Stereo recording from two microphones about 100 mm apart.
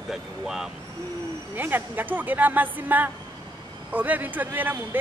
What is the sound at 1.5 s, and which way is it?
Speech, 20° right (ahead or behind).